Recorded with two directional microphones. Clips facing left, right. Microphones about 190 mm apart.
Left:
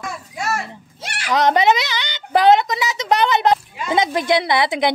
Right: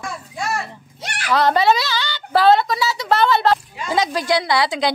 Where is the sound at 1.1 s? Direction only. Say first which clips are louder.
Even; 15° left (ahead or behind).